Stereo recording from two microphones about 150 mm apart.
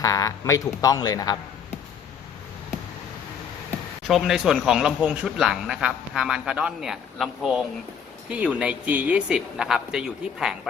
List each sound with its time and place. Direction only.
0.0 s speech: 25° left (ahead or behind)
4.0 s a man's voice: 5° right (ahead or behind)